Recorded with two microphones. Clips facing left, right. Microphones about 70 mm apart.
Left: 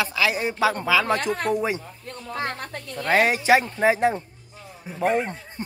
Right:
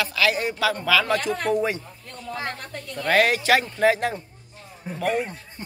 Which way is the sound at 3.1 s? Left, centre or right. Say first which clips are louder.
Left 1 dB; centre.